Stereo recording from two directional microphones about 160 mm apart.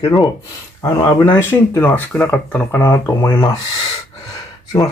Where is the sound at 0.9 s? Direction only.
30° left (ahead or behind).